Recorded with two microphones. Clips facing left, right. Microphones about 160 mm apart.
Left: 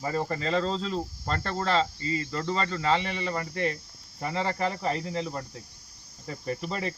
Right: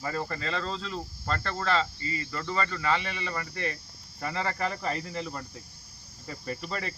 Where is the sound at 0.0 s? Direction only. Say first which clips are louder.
Left 4 dB; 20° left (ahead or behind).